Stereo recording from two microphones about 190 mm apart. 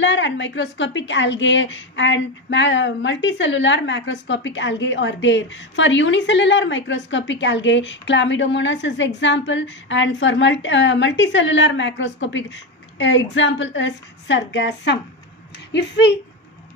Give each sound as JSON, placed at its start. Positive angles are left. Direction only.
{"t": 0.0, "sound": "a woman's voice", "side_deg": 75}